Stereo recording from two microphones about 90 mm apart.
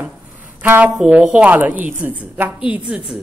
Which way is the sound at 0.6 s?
20° right (ahead or behind).